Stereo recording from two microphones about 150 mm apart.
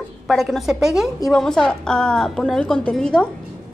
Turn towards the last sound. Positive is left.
turn(degrees=5)  # may be behind; listen again after turning